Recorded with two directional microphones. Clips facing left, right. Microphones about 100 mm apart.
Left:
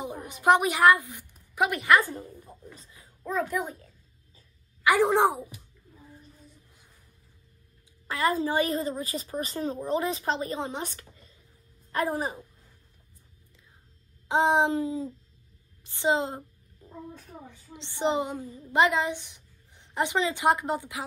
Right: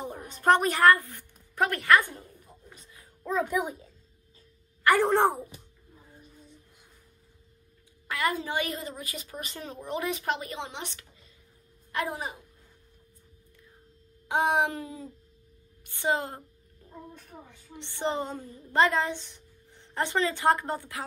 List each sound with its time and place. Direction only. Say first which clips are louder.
0.0 s a woman's voice: left 1 dB; 15° left (ahead or behind)
2.3 s a sound: left 6 dB; 15° left (ahead or behind)
3.3 s a child's voice: right 1 dB; 5° right (ahead or behind)
4.8 s a woman's voice: left 1 dB; 15° left (ahead or behind)
8.1 s a woman's voice: left 3 dB; 30° left (ahead or behind)
14.2 s a sound: left 3 dB; 25° left (ahead or behind)
17.7 s a woman's voice: left 3 dB; 20° left (ahead or behind)